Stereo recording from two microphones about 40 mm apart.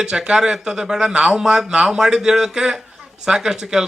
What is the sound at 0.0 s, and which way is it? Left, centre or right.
Speech, centre.